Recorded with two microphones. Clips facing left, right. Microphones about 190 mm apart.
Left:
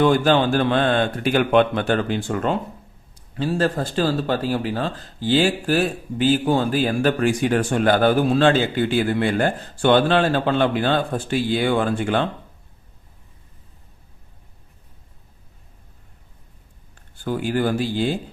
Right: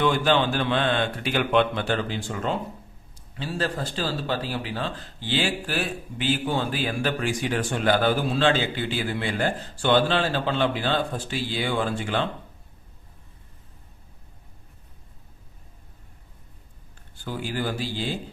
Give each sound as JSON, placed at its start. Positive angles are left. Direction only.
{"t": 0.0, "sound": "speech", "side_deg": 45}
{"t": 17.2, "sound": "speech", "side_deg": 55}